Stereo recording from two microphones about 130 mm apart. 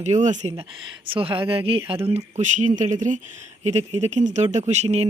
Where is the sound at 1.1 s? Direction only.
40° right (ahead or behind); by 2.7 s 75° right (ahead or behind).